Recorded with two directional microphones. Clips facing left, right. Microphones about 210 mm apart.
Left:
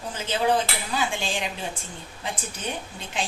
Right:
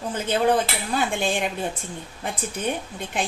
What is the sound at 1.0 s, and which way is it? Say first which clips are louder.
A woman's voice: right 5 dB; 55° right (ahead or behind).